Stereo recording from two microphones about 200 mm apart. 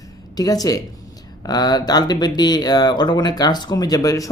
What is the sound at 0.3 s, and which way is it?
Speech, 20° left (ahead or behind).